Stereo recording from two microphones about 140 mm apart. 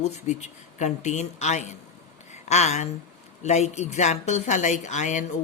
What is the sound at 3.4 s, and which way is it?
Speech, 55° left (ahead or behind).